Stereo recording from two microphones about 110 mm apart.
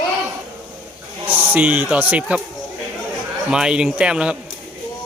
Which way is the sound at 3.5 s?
10° right (ahead or behind).